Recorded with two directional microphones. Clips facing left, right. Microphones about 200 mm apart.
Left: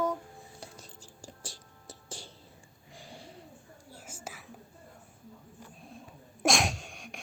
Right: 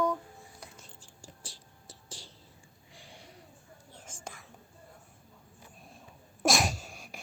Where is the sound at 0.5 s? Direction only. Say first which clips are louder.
Left 3 dB; 35° left (ahead or behind).